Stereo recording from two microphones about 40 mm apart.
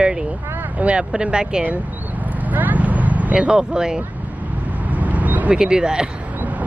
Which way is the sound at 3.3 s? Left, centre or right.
Right.